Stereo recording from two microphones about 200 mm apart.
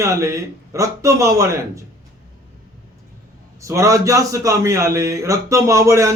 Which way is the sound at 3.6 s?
15° right (ahead or behind).